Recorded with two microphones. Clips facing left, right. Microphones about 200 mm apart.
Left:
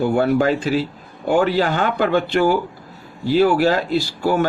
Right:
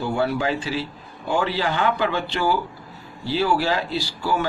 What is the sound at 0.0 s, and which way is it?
Speech, 50° left (ahead or behind).